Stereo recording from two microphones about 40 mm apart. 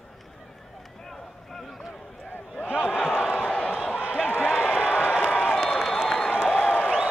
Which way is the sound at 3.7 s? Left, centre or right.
Right.